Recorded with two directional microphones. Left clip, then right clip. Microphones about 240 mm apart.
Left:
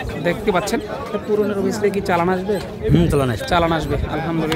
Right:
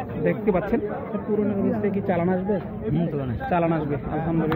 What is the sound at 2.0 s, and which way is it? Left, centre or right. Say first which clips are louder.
Speech: left 6 dB; centre.